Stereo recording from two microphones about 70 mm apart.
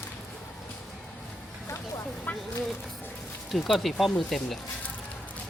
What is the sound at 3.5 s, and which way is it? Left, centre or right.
Speech, centre.